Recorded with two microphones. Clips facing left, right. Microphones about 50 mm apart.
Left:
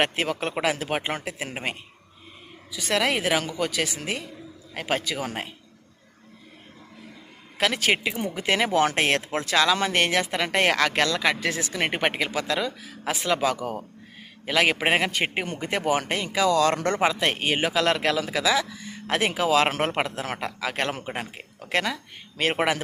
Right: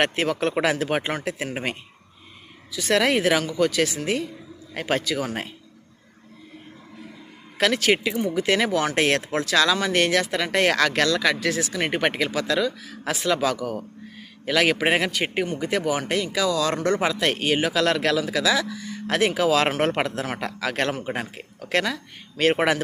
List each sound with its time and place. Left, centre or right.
0.0 s speech: centre
2.7 s speech: centre
5.0 s speech: centre
7.6 s speech: centre; by 17.0 s left
17.0 s speech: left